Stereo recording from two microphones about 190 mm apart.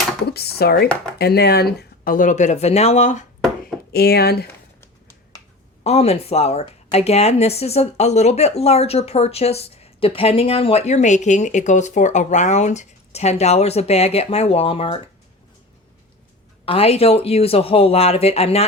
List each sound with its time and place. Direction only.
0.3 s dishes: 55° left (ahead or behind)
1.2 s speech: 60° left (ahead or behind); by 3.2 s 40° left (ahead or behind)
3.9 s speech: 55° left (ahead or behind)
5.8 s speech: 35° left (ahead or behind)
16.6 s speech: 30° left (ahead or behind)